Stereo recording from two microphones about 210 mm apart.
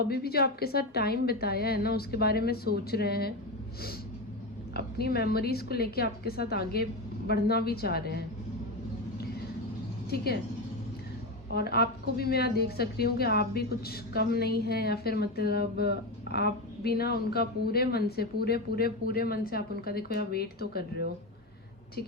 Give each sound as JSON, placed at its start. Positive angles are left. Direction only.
{"t": 0.1, "sound": "a woman's voice", "side_deg": 50}
{"t": 4.7, "sound": "a woman's voice", "side_deg": 50}
{"t": 11.5, "sound": "a woman's voice", "side_deg": 50}